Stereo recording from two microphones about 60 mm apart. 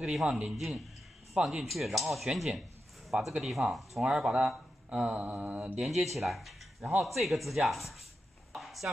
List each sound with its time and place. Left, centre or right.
0.0 s speech: centre
3.6 s speech: right
4.0 s speech: centre
4.8 s mantra: right
5.8 s speech: centre
8.5 s a sound: centre